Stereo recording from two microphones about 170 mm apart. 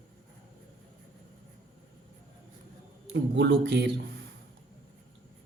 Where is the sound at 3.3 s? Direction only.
90° right.